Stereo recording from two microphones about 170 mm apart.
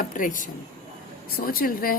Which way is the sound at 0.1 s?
50° left (ahead or behind).